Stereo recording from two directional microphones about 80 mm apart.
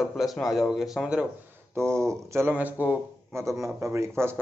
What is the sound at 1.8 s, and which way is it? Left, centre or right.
Speech, right.